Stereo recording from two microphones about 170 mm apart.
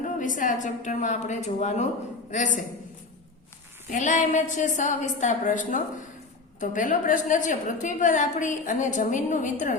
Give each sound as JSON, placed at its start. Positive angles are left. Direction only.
{"t": 0.0, "sound": "a woman's voice", "side_deg": 50}
{"t": 3.8, "sound": "a woman's voice", "side_deg": 45}